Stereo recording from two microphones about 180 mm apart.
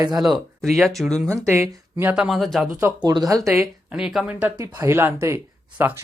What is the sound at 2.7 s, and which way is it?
Speech, 20° right (ahead or behind).